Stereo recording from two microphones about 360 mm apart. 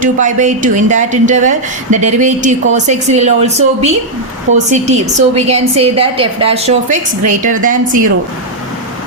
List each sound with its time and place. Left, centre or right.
0.0 s a woman's voice: right